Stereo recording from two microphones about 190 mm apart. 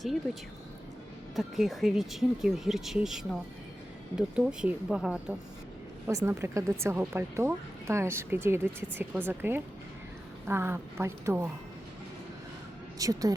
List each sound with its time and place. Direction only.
1.4 s speech: centre (ahead or behind)
6.1 s speech: 15° right (ahead or behind)
13.0 s speech: 20° right (ahead or behind)